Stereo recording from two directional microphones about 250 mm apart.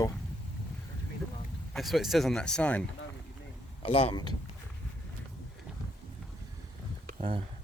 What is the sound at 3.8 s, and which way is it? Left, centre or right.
Speech, left.